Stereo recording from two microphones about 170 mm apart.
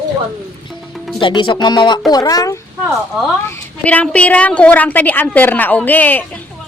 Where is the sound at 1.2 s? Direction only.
30° left (ahead or behind).